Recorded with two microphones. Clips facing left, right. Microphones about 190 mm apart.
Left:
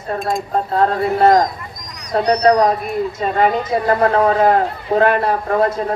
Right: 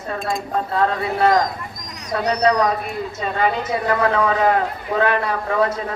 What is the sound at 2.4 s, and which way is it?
Speech, 45° left (ahead or behind).